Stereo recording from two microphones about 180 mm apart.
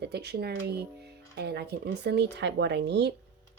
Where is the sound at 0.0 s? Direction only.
65° right (ahead or behind).